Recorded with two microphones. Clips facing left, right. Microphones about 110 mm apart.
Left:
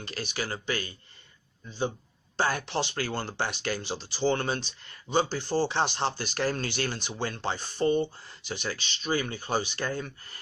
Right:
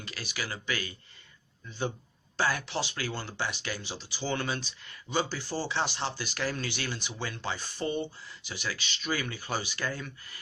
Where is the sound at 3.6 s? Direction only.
60° left (ahead or behind).